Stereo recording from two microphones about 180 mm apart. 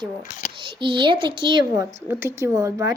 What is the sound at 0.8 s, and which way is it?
Speech, 30° right (ahead or behind).